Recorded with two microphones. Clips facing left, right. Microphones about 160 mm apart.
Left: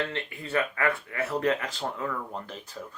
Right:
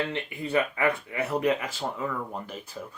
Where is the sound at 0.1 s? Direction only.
15° right (ahead or behind).